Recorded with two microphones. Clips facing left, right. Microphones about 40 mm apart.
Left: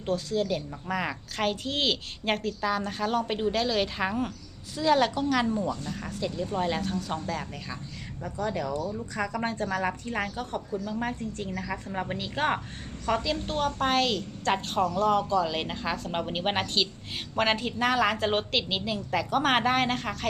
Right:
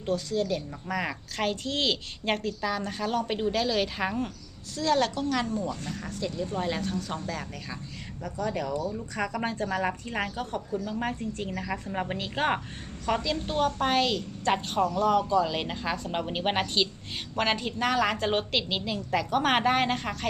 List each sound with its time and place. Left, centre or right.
0.0 s a woman's voice: centre
9.1 s a woman's voice: centre